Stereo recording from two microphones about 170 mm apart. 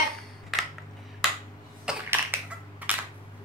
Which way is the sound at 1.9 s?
10° right (ahead or behind).